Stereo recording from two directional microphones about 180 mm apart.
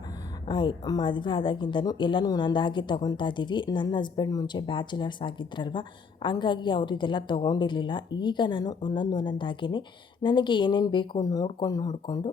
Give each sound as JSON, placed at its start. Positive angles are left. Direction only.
{"t": 0.4, "sound": "a woman's voice", "side_deg": 25}